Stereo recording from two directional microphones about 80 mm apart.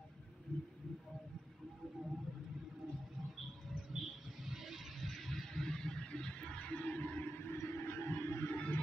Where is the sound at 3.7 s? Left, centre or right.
Centre.